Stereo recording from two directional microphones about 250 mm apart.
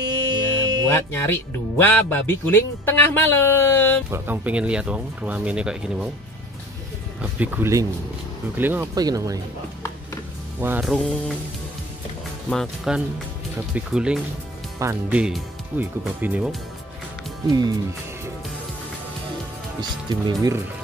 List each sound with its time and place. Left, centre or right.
0.8 s speech: centre
4.1 s speech: centre
7.2 s speech: centre
10.6 s speech: centre
12.4 s speech: centre
19.8 s speech: centre